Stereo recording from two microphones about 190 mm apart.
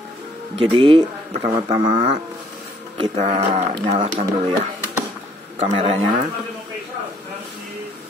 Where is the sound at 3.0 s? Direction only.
35° right (ahead or behind).